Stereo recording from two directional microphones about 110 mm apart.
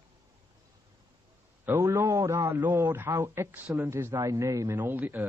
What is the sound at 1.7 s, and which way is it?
Speech, 20° right (ahead or behind).